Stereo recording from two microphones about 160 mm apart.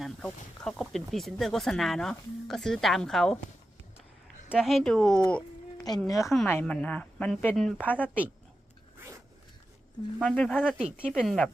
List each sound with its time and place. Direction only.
0.2 s speech: 5° left (ahead or behind)
4.4 s speech: centre (ahead or behind)
5.7 s a sound: 25° left (ahead or behind)
6.1 s a woman's voice: 20° left (ahead or behind)
6.5 s speech: 10° left (ahead or behind)
10.2 s speech: 5° left (ahead or behind)
10.6 s speech: 5° right (ahead or behind)